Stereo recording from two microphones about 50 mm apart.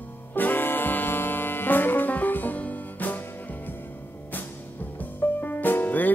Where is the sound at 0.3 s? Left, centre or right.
Left.